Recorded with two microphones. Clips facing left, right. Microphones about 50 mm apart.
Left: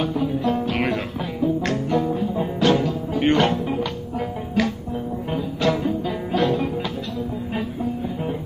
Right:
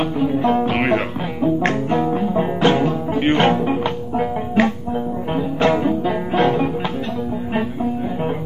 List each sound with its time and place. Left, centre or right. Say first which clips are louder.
0.0 s music: right 4 dB; right